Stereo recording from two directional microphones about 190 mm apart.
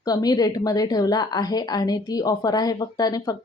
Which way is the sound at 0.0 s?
20° left (ahead or behind).